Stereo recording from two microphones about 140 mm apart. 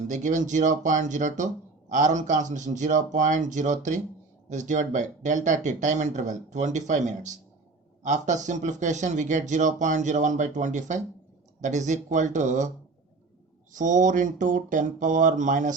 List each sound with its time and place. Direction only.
0.1 s speech: 60° right (ahead or behind)
13.7 s speech: 65° right (ahead or behind)